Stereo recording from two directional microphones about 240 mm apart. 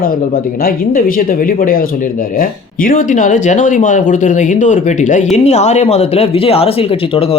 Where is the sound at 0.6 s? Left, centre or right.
Left.